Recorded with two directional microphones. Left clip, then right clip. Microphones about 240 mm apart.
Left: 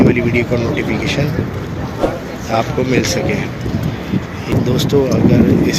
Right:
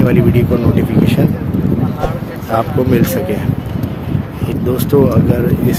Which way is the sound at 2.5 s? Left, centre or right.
Centre.